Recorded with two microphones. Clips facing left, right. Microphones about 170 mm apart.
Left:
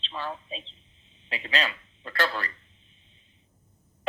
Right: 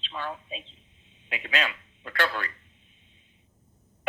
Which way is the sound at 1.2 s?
35° left (ahead or behind).